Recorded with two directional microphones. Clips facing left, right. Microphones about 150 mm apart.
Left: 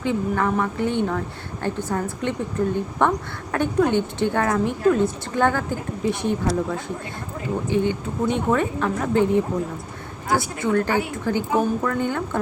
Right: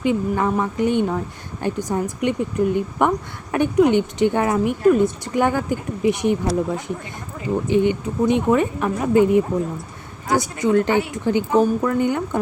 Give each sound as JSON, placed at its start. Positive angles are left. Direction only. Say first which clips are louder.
{"t": 0.0, "sound": "a woman's voice", "louder": "right 2 dB", "side_deg": -15}